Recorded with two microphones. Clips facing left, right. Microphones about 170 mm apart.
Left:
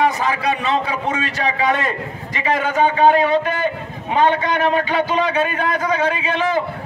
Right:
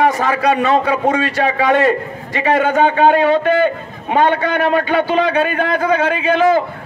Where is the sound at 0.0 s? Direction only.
45° right (ahead or behind).